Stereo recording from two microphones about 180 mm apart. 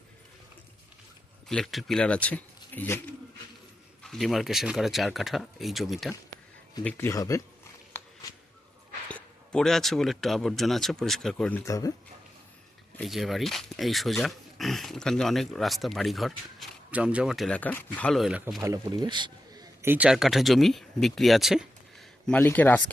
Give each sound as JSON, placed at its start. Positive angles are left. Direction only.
{"t": 1.5, "sound": "speech", "side_deg": 0}
{"t": 4.0, "sound": "speech", "side_deg": 0}
{"t": 6.8, "sound": "speech", "side_deg": 15}
{"t": 7.9, "sound": "a sound", "side_deg": 15}
{"t": 9.0, "sound": "speech", "side_deg": 5}
{"t": 13.0, "sound": "speech", "side_deg": 0}
{"t": 18.7, "sound": "a man's voice", "side_deg": -20}
{"t": 19.8, "sound": "speech", "side_deg": -10}